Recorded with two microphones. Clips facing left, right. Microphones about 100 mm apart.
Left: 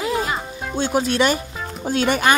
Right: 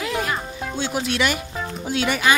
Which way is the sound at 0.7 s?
40° left (ahead or behind).